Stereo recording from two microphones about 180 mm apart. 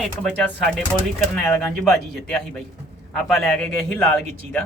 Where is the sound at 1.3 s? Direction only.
5° left (ahead or behind).